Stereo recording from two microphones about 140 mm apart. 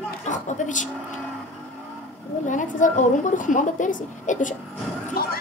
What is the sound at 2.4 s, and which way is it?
A woman's voice, 65° left (ahead or behind).